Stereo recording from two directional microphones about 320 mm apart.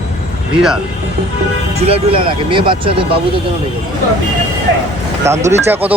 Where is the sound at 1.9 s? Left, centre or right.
Centre.